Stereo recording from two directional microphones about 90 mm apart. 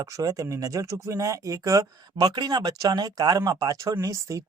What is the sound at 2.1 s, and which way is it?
Speech, 55° right (ahead or behind).